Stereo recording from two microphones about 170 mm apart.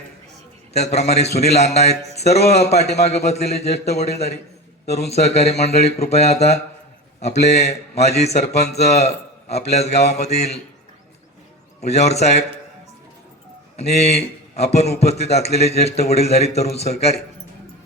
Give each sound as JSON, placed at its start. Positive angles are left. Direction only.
{"t": 0.7, "sound": "a man's voice", "side_deg": 40}
{"t": 11.8, "sound": "a man's voice", "side_deg": 40}
{"t": 13.7, "sound": "a man's voice", "side_deg": 40}